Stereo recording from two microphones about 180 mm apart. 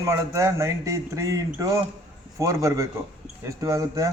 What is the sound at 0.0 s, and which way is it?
Speech, 15° right (ahead or behind).